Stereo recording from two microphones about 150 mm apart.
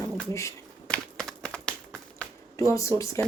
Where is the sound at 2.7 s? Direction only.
20° left (ahead or behind).